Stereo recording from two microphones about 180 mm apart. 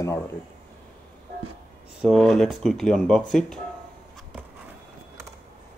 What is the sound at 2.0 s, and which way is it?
Speech, centre (ahead or behind).